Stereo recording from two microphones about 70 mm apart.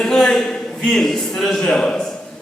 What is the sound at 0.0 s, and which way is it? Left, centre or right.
A man's voice, centre.